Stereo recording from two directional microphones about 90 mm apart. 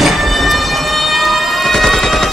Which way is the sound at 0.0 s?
Centre (ahead or behind).